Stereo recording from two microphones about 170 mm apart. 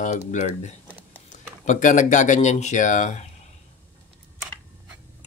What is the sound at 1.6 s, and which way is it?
Speech, 45° left (ahead or behind).